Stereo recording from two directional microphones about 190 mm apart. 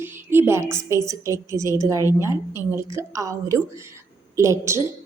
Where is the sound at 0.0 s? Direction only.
10° right (ahead or behind).